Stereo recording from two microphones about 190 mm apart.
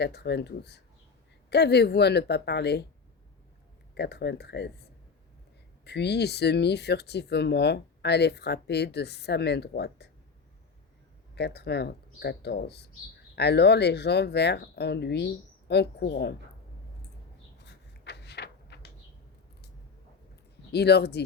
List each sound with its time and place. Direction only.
0.0 s speech: 60° left (ahead or behind)
3.9 s speech: 60° left (ahead or behind)
5.8 s speech: 60° left (ahead or behind)
11.3 s speech: 60° left (ahead or behind)
17.6 s a sound: 60° left (ahead or behind)
20.7 s speech: 60° left (ahead or behind)